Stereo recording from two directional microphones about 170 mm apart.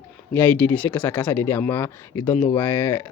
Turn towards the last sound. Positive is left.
turn(degrees=10)  # may be behind; listen again after turning